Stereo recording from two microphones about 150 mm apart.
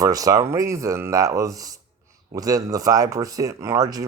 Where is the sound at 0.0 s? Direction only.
25° right (ahead or behind).